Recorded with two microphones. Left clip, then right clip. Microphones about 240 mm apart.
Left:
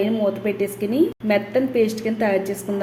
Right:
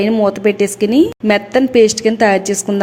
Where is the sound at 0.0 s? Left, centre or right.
Right.